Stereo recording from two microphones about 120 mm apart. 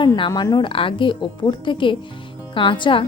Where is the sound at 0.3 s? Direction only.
35° left (ahead or behind).